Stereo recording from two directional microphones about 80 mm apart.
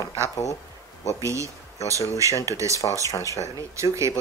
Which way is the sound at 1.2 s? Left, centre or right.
Right.